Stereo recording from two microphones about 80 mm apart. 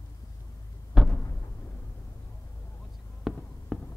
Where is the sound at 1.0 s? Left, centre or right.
Centre.